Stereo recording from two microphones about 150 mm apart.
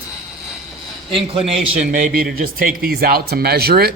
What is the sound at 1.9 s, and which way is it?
Speech, 80° right.